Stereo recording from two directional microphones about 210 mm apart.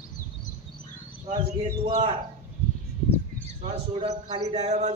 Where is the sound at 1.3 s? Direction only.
20° right (ahead or behind).